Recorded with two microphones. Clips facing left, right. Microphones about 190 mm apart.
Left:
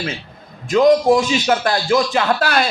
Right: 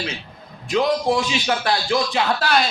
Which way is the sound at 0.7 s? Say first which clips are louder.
Left 7 dB; 45° left (ahead or behind).